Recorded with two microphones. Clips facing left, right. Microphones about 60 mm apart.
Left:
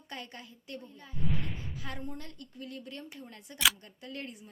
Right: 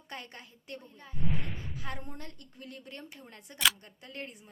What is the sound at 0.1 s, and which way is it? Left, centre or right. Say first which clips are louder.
A woman's voice: left 1 dB; right.